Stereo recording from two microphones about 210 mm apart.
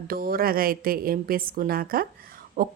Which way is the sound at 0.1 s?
45° right (ahead or behind).